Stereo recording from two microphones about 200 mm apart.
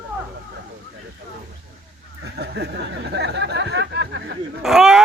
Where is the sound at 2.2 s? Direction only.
55° right (ahead or behind).